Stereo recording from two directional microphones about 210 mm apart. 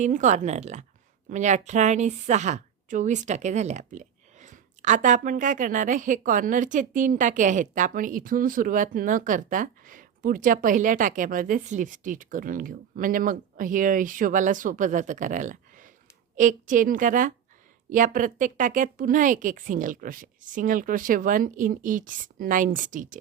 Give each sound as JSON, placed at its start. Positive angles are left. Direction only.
{"t": 0.0, "sound": "a woman's voice", "side_deg": -35}